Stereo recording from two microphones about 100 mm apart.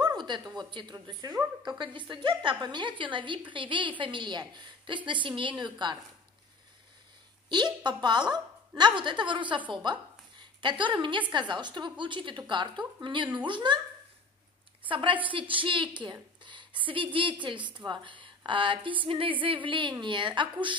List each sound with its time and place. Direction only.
0.0 s a sound: 45° right (ahead or behind)
0.7 s a woman's voice: 50° right (ahead or behind)
1.0 s a woman's voice: 40° right (ahead or behind)
7.4 s a woman's voice: 50° right (ahead or behind)
14.9 s speech: 60° right (ahead or behind)
16.0 s a sound: 50° right (ahead or behind)
16.8 s speech: 60° right (ahead or behind)
17.6 s a woman's voice: 15° right (ahead or behind)
17.8 s speech: 50° right (ahead or behind)